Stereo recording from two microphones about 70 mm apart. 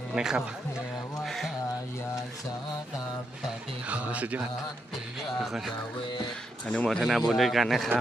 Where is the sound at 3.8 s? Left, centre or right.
Centre.